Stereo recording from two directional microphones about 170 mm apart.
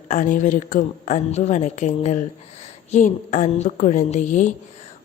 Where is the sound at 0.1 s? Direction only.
45° left (ahead or behind).